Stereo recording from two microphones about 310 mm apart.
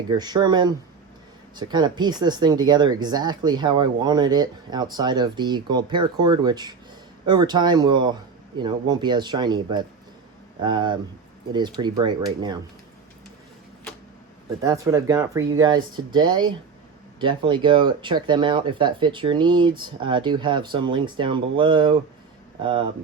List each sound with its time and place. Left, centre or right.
0.1 s speech: centre
14.6 s speech: centre